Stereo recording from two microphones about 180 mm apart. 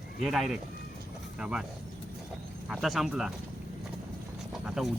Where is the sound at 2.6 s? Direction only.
Centre (ahead or behind).